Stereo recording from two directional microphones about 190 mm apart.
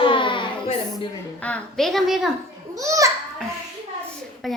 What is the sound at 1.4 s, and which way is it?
Speech, 5° left (ahead or behind).